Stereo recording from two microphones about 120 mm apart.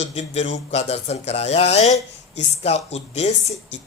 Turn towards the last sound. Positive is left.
turn(degrees=65)  # may be behind; listen again after turning